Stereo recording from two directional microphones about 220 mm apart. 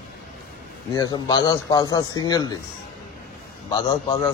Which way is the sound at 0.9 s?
15° left (ahead or behind).